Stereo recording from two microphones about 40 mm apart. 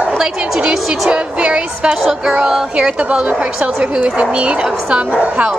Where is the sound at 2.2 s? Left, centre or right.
Centre.